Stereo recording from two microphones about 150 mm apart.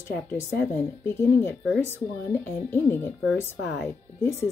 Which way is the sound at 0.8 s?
15° left (ahead or behind).